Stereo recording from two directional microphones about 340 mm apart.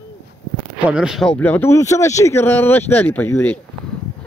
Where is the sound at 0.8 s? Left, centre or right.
Centre.